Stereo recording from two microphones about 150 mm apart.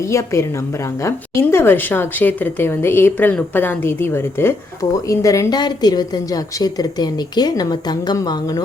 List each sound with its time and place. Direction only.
0.0 s speech: 20° left (ahead or behind)